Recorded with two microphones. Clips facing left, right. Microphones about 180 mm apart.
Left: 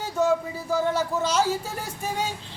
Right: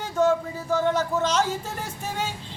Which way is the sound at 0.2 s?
10° left (ahead or behind).